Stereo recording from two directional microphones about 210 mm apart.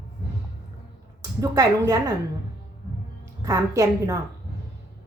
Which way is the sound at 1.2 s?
15° right (ahead or behind).